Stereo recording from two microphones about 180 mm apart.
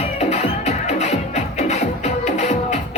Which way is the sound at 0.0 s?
40° left (ahead or behind).